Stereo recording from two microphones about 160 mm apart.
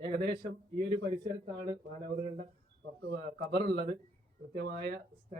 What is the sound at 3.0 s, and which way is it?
Speech, 75° right (ahead or behind).